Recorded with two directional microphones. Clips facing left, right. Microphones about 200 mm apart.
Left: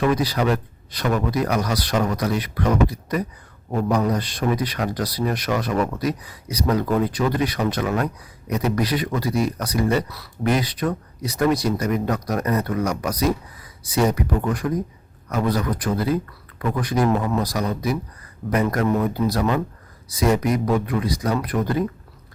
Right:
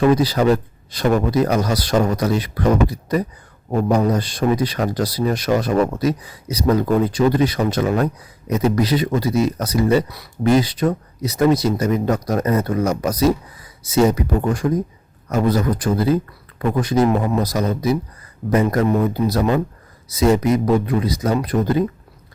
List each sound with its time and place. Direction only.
0.1 s speech: 30° right (ahead or behind)
3.7 s speech: 25° right (ahead or behind)